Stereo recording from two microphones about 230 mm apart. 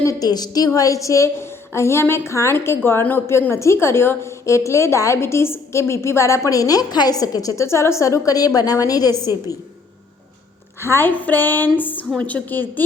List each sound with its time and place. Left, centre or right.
0.0 s a woman's voice: centre
10.8 s a woman's voice: centre